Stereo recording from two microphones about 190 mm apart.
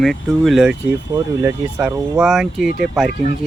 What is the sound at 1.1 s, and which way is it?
Speech, 15° right (ahead or behind).